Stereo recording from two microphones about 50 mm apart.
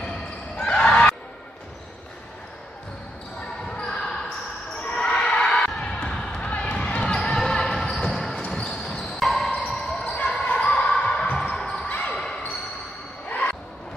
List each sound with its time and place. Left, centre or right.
0.6 s a sound: left
3.6 s basketball bounce: centre
7.2 s basketball bounce: centre
9.2 s music: centre
9.7 s basketball bounce: centre
11.8 s basketball bounce: left
13.3 s basketball bounce: left